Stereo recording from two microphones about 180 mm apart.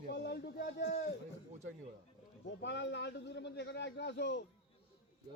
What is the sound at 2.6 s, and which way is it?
A man's voice, 75° left (ahead or behind).